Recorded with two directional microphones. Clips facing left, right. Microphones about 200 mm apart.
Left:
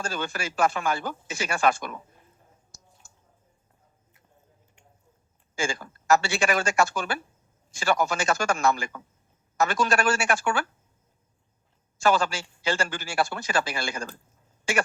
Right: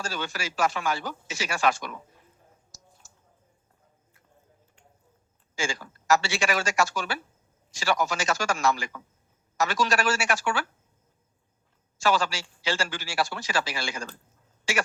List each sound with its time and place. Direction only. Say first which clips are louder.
0.1 s a man's voice: left 2 dB; 50° left (ahead or behind)
3.0 s a sound: even; 55° left (ahead or behind)
5.5 s a man's voice: left 2 dB; 55° left (ahead or behind)
12.0 s a man's voice: left 2 dB; 55° left (ahead or behind)